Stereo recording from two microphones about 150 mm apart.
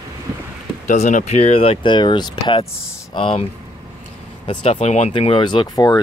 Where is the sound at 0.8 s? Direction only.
55° left (ahead or behind); by 3.4 s 35° left (ahead or behind).